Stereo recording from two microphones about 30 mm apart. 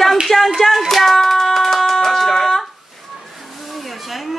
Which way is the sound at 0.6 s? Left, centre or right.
Centre.